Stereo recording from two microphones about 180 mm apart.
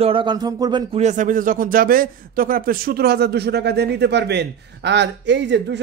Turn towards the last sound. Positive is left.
turn(degrees=-80)